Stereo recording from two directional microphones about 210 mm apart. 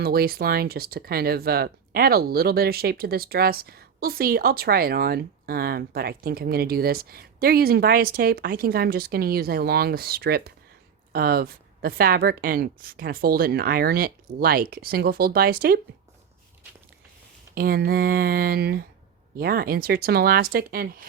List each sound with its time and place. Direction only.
0.0 s speech: 45° right (ahead or behind)
17.5 s speech: 45° right (ahead or behind)